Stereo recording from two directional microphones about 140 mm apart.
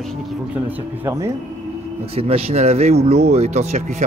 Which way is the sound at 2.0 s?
45° right (ahead or behind).